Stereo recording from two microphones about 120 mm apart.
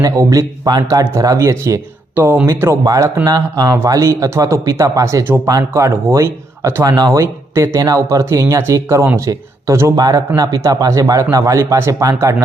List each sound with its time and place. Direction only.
0.0 s speech: 30° right (ahead or behind)
2.8 s speech: 30° right (ahead or behind)